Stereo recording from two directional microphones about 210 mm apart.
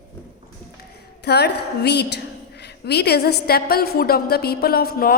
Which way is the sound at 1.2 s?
50° left (ahead or behind).